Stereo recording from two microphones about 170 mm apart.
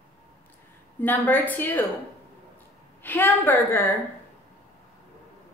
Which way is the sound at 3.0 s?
10° left (ahead or behind).